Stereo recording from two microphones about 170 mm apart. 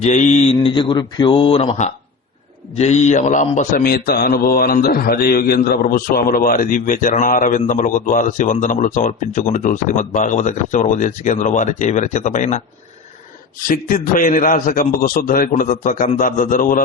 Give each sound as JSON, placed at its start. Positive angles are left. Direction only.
{"t": 0.0, "sound": "speech", "side_deg": 45}
{"t": 2.7, "sound": "mantra", "side_deg": 40}
{"t": 13.7, "sound": "mantra", "side_deg": 55}